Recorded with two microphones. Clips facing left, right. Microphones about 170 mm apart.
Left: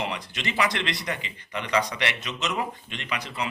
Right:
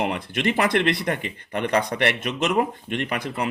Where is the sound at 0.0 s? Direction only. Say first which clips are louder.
Right 7 dB; 55° right (ahead or behind).